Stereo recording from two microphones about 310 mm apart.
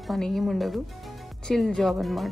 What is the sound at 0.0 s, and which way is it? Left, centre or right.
Speech, centre.